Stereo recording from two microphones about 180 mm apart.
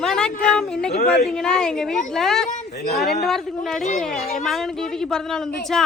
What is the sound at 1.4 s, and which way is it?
A woman's voice, 5° left (ahead or behind).